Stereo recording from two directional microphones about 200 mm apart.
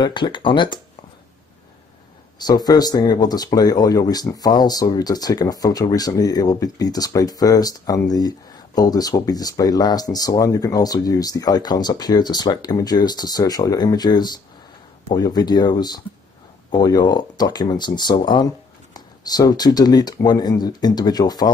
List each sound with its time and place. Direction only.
0.0 s speech: 25° left (ahead or behind)
2.3 s speech: 20° left (ahead or behind)